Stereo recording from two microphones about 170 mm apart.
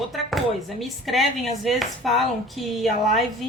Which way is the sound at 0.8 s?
Centre (ahead or behind).